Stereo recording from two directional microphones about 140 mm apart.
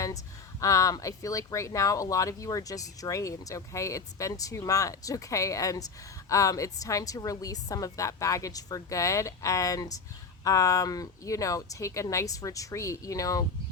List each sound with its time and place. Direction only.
0.6 s speech: 25° left (ahead or behind)